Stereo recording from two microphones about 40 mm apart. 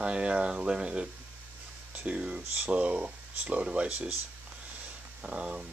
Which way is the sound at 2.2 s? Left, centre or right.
Right.